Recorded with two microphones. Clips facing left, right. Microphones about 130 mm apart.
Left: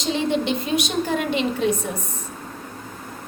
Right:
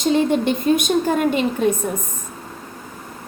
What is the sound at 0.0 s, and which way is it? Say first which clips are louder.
A woman's voice: right 5 dB; 50° right (ahead or behind).